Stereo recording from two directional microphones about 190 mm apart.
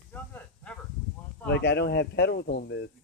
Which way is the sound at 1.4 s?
60° left (ahead or behind).